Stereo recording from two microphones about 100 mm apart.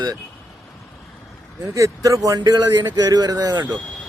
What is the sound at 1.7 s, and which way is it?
A man's voice, 35° right (ahead or behind).